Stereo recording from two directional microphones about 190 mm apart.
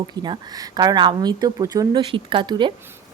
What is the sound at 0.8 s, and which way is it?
Speech, 20° right (ahead or behind).